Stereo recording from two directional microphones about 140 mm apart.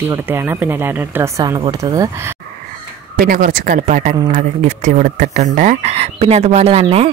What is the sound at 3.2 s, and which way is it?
Speech, 75° right (ahead or behind).